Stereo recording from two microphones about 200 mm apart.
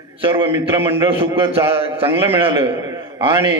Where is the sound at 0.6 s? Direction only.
10° right (ahead or behind).